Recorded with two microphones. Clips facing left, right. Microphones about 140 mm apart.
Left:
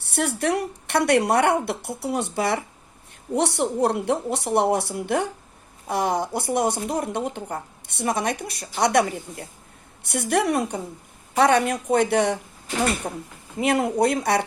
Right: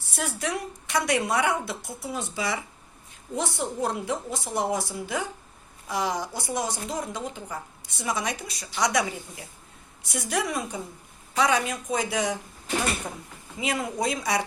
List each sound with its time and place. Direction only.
0.0 s a woman's voice: 65° left (ahead or behind)
3.3 s a woman's voice: 70° left (ahead or behind)
13.0 s a woman's voice: 45° left (ahead or behind)
13.6 s a woman's voice: 65° left (ahead or behind)